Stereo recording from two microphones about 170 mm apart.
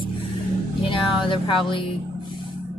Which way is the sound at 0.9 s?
30° left (ahead or behind).